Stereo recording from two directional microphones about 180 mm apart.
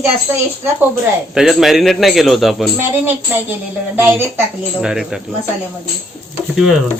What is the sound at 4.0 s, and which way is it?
A woman's voice, 10° right (ahead or behind).